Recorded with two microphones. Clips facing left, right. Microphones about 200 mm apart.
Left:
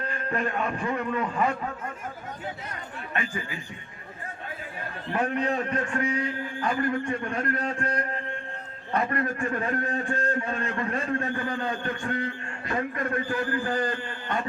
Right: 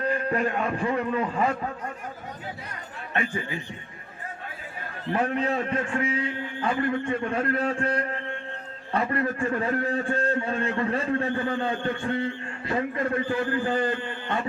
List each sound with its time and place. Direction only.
0.1 s a man's voice: 30° right (ahead or behind)
5.4 s a man's voice: 25° right (ahead or behind)